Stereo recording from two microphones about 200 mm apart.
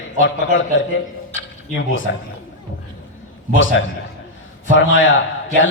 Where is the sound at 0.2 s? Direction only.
70° left (ahead or behind).